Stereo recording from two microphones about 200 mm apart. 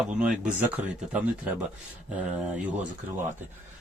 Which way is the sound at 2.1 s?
5° right (ahead or behind).